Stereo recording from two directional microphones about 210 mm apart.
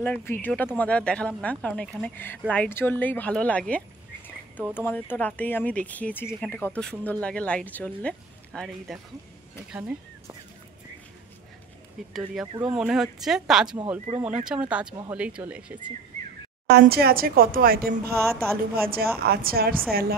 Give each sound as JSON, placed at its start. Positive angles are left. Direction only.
{"t": 0.0, "sound": "speech", "side_deg": 10}
{"t": 12.1, "sound": "speech", "side_deg": 0}
{"t": 16.6, "sound": "speech", "side_deg": -50}
{"t": 18.1, "sound": "speech", "side_deg": -10}
{"t": 18.8, "sound": "speech", "side_deg": -45}